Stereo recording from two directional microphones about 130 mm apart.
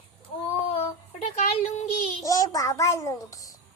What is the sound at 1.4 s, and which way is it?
Speech, 60° left (ahead or behind).